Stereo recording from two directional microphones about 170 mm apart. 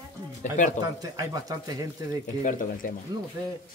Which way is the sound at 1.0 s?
20° right (ahead or behind).